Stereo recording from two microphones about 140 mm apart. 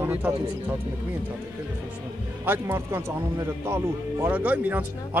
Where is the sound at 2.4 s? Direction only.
15° right (ahead or behind).